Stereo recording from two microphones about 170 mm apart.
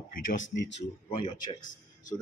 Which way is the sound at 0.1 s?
90° left.